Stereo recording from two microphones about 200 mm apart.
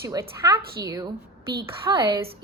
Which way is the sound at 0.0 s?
15° right (ahead or behind).